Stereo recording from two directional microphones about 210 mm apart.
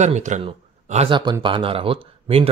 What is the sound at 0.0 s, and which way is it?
Speech, 35° right (ahead or behind).